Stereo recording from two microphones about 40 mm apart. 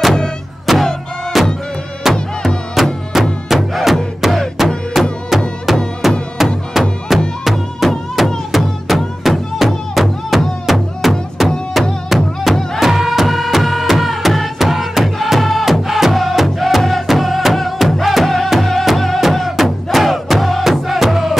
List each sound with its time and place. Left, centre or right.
0.7 s music: centre